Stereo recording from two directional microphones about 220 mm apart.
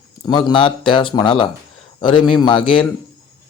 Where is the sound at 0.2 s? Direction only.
20° left (ahead or behind).